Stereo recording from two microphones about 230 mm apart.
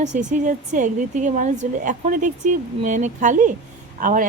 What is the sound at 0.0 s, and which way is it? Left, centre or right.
Speech, right.